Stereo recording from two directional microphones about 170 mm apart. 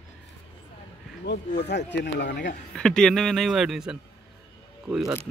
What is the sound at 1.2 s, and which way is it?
Speech, 80° left.